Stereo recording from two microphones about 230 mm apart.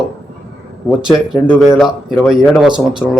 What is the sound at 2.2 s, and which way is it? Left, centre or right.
Speech, centre.